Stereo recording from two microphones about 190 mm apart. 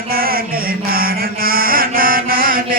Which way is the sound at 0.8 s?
50° right (ahead or behind).